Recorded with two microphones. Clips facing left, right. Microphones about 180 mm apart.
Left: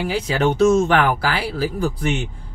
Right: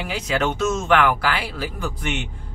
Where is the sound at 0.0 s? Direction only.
35° left (ahead or behind).